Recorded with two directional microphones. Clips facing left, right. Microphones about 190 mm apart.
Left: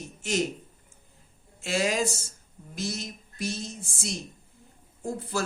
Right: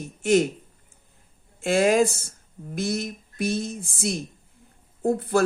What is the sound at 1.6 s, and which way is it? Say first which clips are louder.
Speech: right 8 dB; 55° right (ahead or behind).